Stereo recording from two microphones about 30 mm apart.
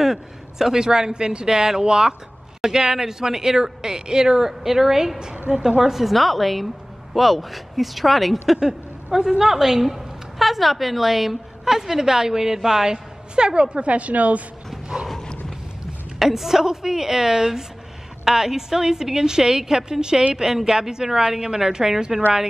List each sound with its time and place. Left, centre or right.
0.0 s a man's voice: centre
0.7 s speech: right
5.8 s a woman's voice: centre
6.1 s speech: centre
9.4 s a woman's voice: centre
9.8 s a woman's voice: centre
12.9 s a woman's voice: right
16.2 s a woman's voice: centre